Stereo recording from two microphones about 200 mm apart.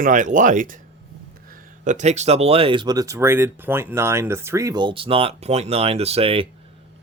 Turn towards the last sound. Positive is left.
turn(degrees=-30)  # may be behind; listen again after turning